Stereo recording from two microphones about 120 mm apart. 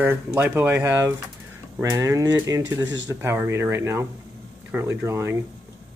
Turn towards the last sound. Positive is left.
turn(degrees=-20)  # may be behind; listen again after turning